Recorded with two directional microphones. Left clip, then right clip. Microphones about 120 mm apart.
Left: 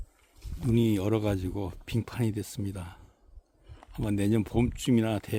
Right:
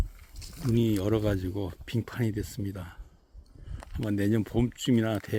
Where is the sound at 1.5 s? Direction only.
30° left (ahead or behind).